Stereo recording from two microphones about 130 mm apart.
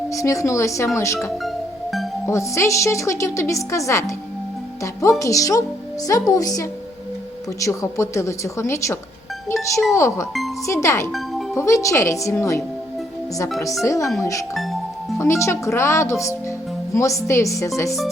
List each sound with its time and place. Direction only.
0.1 s a woman's voice: 25° left (ahead or behind)
13.8 s a woman's voice: 25° left (ahead or behind)
14.5 s speech: centre (ahead or behind)
15.2 s a woman's voice: 20° left (ahead or behind)